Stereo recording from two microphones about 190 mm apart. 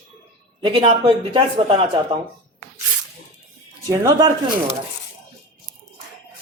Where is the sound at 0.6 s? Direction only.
30° right (ahead or behind).